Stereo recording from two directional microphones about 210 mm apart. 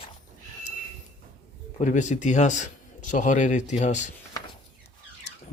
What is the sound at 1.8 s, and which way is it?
Speech, 35° left (ahead or behind).